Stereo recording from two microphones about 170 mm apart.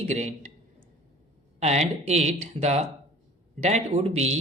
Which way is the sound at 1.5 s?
40° right (ahead or behind).